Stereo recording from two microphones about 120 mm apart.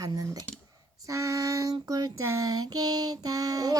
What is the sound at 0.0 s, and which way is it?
Speech, 30° right (ahead or behind).